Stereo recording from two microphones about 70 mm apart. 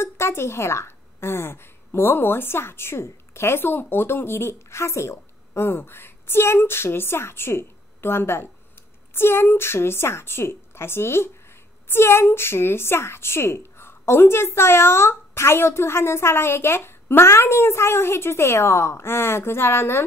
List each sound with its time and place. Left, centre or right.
0.0 s a woman's voice: left